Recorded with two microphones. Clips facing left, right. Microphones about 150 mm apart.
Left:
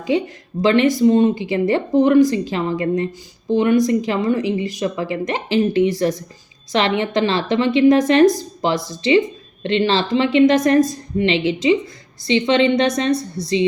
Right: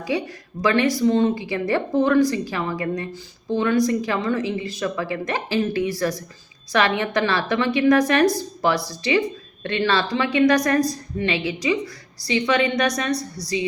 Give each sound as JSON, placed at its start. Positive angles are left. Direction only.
{"t": 0.6, "sound": "a woman's voice", "side_deg": 25}